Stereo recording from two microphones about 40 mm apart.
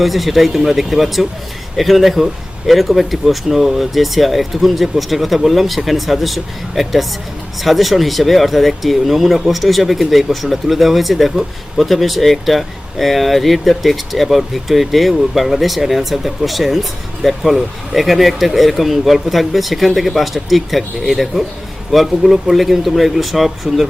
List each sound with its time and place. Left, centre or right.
0.0 s speech: centre